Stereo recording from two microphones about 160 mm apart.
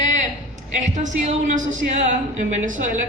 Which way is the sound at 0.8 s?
45° right (ahead or behind).